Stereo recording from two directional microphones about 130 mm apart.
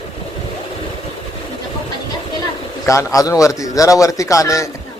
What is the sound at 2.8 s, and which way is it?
A man's voice, 25° left (ahead or behind).